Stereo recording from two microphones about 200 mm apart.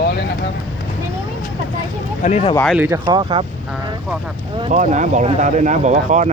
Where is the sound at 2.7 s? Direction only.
10° right (ahead or behind).